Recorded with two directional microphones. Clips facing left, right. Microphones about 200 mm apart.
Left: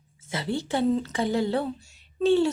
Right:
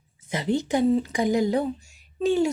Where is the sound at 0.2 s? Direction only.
15° right (ahead or behind).